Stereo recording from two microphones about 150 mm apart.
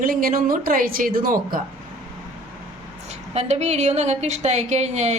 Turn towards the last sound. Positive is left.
turn(degrees=-50)  # may be behind; listen again after turning